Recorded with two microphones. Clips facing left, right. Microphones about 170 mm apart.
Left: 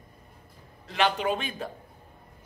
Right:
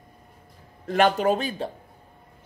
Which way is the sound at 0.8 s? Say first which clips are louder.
Right 6 dB; 50° right (ahead or behind).